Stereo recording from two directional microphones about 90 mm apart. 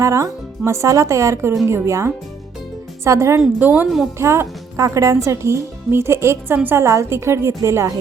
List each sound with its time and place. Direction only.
0.0 s speech: 35° right (ahead or behind)
3.6 s a woman's voice: 20° right (ahead or behind)
4.2 s speech: 30° right (ahead or behind)